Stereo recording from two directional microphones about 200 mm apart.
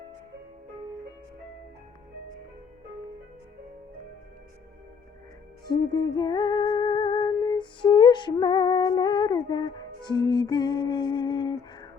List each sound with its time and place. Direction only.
5.6 s music: 20° left (ahead or behind)